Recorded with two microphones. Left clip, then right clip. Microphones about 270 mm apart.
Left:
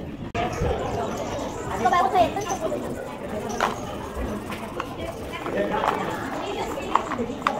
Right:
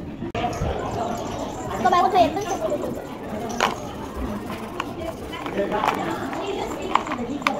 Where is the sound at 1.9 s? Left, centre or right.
Right.